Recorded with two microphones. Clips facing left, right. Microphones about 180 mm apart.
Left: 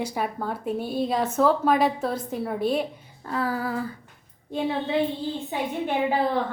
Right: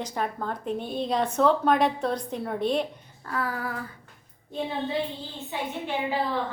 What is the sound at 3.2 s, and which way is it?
Female singing, 25° left (ahead or behind).